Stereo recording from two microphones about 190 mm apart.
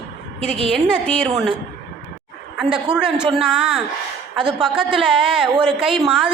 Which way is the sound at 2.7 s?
5° right (ahead or behind).